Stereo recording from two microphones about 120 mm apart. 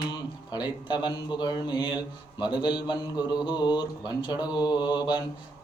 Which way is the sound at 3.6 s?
40° left (ahead or behind).